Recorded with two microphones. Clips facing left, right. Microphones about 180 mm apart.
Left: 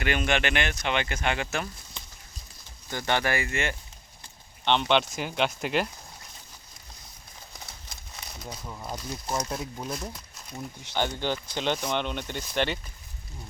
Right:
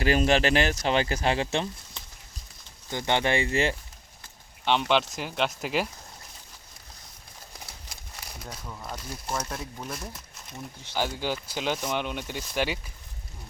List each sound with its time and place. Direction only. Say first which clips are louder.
0.0 s speech: right 4 dB; 35° right (ahead or behind)
2.9 s speech: right 2 dB; 20° right (ahead or behind)
4.6 s speech: even; 5° right (ahead or behind)
8.1 s crumpling: even; 5° right (ahead or behind)
8.4 s speech: left 2 dB; 10° left (ahead or behind)
9.9 s speech: left 3 dB; 5° right (ahead or behind)